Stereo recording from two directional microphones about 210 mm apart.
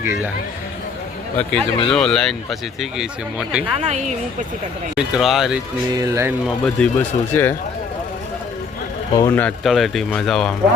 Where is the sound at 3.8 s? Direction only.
35° right (ahead or behind).